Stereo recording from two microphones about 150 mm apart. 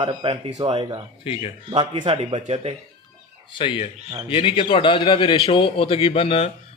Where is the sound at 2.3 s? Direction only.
45° right (ahead or behind).